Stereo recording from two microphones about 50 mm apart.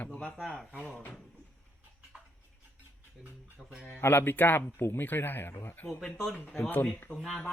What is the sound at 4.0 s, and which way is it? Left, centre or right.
Speech, left.